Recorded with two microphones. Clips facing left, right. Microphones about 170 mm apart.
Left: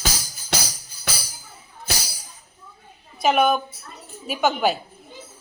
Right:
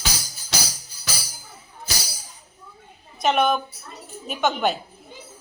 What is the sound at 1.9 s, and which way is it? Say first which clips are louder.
Tambourine: left 3 dB; 60° left (ahead or behind).